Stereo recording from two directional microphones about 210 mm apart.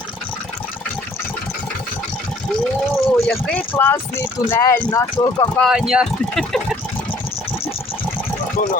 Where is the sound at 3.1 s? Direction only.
5° left (ahead or behind); by 5.5 s 20° left (ahead or behind).